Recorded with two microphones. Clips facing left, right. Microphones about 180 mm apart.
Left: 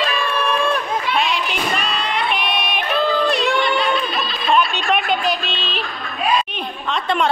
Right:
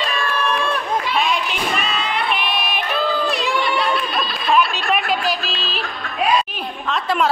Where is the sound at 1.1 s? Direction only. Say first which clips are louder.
Even; centre (ahead or behind).